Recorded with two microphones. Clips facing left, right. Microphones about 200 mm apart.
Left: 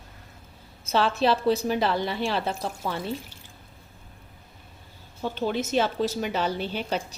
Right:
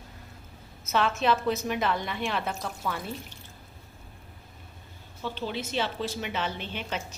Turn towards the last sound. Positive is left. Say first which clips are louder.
# left 6 dB
turn(degrees=35)  # may be behind; listen again after turning